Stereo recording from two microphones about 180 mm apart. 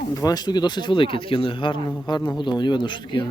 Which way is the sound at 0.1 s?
20° left (ahead or behind).